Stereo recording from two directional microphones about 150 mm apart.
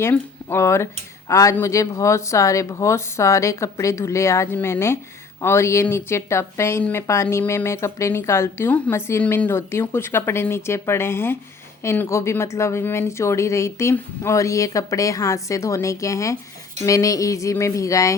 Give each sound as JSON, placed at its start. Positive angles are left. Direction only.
{"t": 0.0, "sound": "speech", "side_deg": 15}